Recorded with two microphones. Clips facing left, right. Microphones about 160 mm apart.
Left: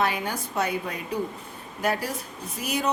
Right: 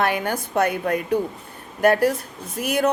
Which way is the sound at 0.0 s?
60° right (ahead or behind).